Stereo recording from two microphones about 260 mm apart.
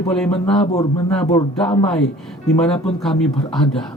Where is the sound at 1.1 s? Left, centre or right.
Centre.